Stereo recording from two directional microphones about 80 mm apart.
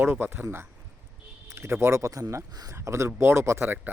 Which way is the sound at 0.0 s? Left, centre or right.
Right.